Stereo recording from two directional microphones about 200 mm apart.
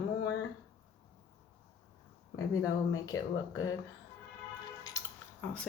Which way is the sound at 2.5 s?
15° left (ahead or behind).